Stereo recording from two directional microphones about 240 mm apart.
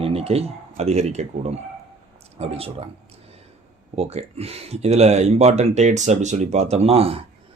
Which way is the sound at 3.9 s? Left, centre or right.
Right.